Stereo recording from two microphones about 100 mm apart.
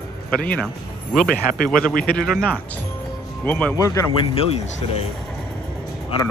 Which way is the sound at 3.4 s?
15° left (ahead or behind).